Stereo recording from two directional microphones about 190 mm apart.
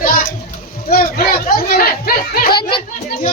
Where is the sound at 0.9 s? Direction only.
50° left (ahead or behind).